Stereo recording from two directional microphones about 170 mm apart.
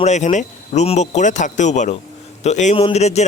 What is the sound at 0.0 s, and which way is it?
Speech, 45° left (ahead or behind).